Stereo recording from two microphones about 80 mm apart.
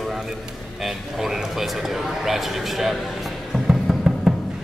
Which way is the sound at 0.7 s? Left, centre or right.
Centre.